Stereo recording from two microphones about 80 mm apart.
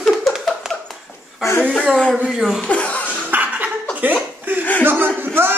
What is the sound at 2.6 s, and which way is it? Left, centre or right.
Laughter, centre.